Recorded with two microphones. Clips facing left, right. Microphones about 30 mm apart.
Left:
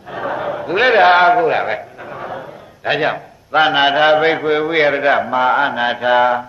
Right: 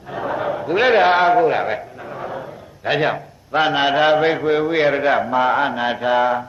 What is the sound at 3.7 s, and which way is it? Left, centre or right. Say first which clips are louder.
A man's voice: left 2 dB; left.